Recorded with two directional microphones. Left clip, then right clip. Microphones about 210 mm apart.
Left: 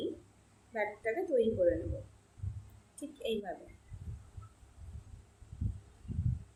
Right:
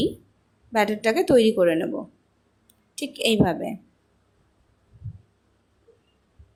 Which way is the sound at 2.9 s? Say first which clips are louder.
Right 15 dB; 50° right (ahead or behind).